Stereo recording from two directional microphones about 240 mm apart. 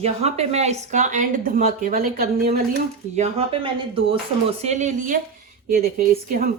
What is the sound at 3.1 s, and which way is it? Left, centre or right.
Speech, right.